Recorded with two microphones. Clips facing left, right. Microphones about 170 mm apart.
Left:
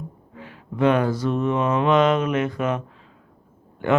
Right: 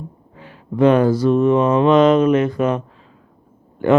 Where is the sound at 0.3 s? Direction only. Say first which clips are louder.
Right 7 dB; 35° right (ahead or behind).